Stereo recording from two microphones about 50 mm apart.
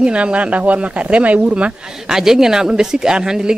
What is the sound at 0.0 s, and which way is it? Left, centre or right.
Speech, right.